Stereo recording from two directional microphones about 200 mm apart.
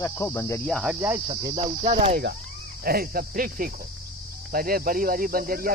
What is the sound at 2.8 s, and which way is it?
Speech, 50° right (ahead or behind).